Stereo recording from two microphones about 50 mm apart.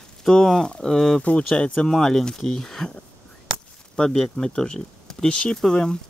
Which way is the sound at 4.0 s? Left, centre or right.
Centre.